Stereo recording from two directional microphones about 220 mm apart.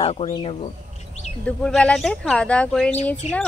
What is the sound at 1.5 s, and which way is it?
A woman's voice, 5° left (ahead or behind).